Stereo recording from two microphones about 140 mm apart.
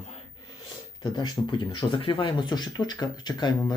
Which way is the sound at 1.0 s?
30° left (ahead or behind).